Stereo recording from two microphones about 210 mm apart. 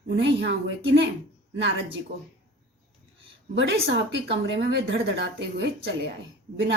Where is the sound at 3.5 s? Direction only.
55° right (ahead or behind).